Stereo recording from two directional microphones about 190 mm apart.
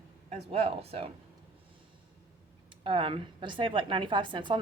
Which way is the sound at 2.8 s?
25° right (ahead or behind).